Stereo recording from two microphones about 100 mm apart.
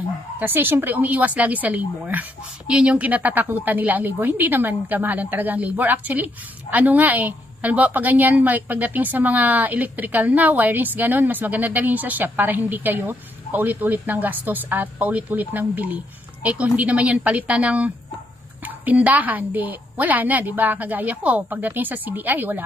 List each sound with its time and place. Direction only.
0.4 s a woman's voice: 20° right (ahead or behind)